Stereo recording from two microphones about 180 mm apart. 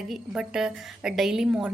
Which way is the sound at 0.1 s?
5° right (ahead or behind).